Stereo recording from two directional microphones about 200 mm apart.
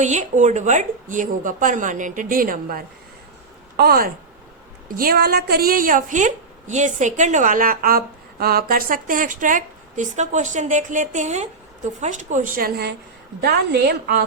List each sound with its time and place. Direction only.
0.0 s a woman's voice: 35° right (ahead or behind); by 14.3 s 50° right (ahead or behind)